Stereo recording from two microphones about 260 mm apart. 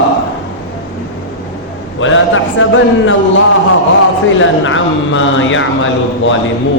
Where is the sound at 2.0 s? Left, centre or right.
Left.